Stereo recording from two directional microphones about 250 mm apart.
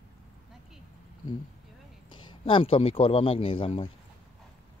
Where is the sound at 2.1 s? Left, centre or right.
Centre.